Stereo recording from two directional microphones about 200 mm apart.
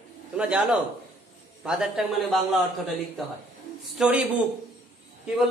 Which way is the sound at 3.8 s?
Centre (ahead or behind).